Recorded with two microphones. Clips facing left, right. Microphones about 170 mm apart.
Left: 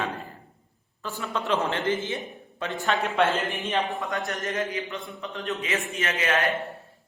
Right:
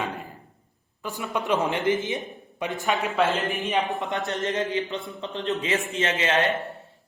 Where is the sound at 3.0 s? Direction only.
Centre (ahead or behind).